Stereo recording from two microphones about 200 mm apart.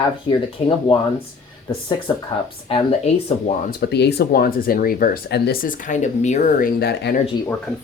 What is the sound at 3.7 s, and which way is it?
Speech, 55° left (ahead or behind).